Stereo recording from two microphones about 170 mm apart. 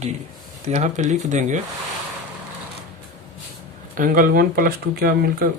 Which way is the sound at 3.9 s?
55° right (ahead or behind).